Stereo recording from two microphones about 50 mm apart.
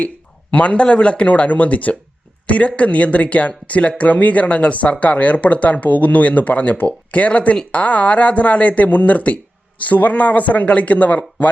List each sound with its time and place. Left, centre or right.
0.5 s speech: left